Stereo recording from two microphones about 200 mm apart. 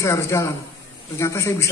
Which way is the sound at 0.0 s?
15° left (ahead or behind).